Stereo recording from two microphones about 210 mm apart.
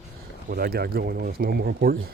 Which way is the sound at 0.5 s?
45° right (ahead or behind).